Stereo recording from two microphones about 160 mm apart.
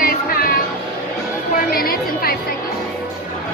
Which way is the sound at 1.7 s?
70° left (ahead or behind).